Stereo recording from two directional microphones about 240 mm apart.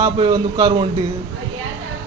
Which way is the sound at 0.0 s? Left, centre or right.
Centre.